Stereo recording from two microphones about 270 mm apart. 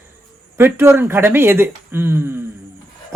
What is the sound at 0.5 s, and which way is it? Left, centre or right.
Speech, centre.